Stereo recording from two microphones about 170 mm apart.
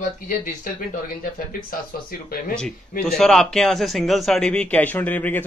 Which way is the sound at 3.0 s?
5° left (ahead or behind).